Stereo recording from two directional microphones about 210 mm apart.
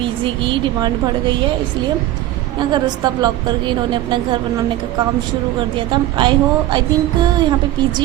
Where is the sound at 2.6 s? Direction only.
20° right (ahead or behind).